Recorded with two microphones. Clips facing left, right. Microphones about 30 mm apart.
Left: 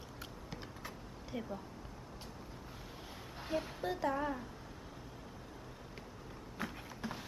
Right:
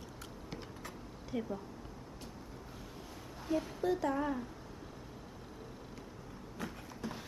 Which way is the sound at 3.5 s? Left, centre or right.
Left.